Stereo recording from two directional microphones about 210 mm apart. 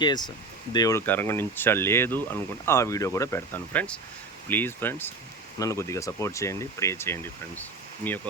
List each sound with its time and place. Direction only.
0.0 s speech: 20° left (ahead or behind)